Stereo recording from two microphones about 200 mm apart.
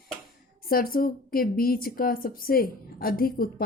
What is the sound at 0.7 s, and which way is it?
Speech, 45° left (ahead or behind).